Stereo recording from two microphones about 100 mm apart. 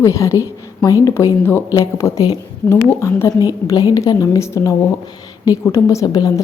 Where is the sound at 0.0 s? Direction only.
30° left (ahead or behind).